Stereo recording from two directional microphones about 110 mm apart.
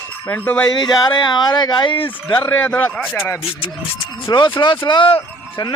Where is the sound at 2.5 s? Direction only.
15° left (ahead or behind).